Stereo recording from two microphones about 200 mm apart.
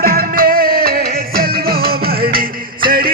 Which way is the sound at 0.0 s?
45° right (ahead or behind).